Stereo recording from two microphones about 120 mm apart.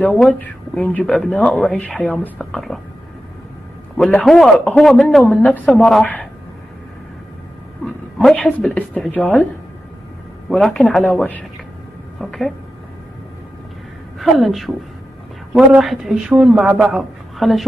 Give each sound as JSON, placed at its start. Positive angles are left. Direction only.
{"t": 0.3, "sound": "speech", "side_deg": 15}
{"t": 4.1, "sound": "a man's voice", "side_deg": 5}
{"t": 5.2, "sound": "speech", "side_deg": 15}
{"t": 5.7, "sound": "a man's voice", "side_deg": 0}
{"t": 7.8, "sound": "speech", "side_deg": 5}
{"t": 10.5, "sound": "a man's voice", "side_deg": 5}
{"t": 12.2, "sound": "a man's voice", "side_deg": 0}
{"t": 14.1, "sound": "a man's voice", "side_deg": 0}